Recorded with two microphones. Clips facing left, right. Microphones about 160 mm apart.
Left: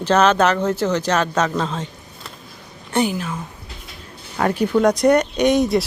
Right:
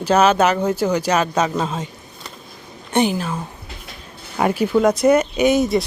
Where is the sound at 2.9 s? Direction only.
25° right (ahead or behind).